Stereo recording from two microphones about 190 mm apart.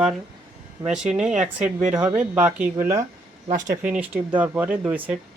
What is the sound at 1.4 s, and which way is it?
Speech, 5° right (ahead or behind).